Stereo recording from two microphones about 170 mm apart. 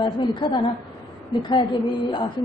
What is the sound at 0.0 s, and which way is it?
A woman's voice, 30° left (ahead or behind).